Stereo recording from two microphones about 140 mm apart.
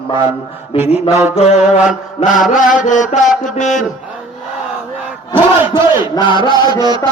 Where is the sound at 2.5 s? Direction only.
65° left (ahead or behind).